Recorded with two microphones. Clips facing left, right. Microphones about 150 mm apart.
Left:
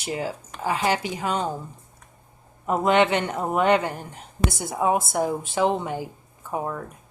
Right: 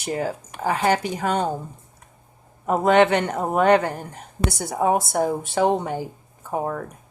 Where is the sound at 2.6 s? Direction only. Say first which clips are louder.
Right 3 dB; 45° right (ahead or behind).